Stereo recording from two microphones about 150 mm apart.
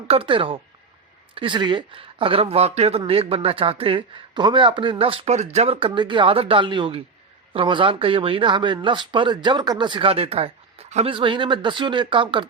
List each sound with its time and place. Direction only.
0.1 s speech: 35° right (ahead or behind)